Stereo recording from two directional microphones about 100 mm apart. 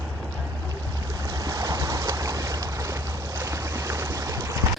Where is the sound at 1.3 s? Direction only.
35° right (ahead or behind).